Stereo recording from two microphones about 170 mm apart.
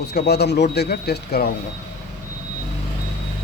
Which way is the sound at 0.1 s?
75° left (ahead or behind).